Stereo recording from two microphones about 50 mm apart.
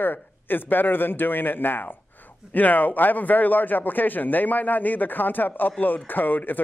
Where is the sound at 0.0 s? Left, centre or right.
Left.